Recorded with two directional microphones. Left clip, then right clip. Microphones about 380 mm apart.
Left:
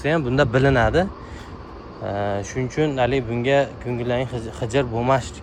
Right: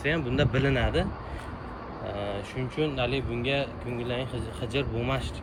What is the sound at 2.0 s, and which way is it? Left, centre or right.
Speech, left.